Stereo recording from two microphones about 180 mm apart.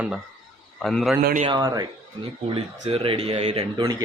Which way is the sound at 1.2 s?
50° right (ahead or behind).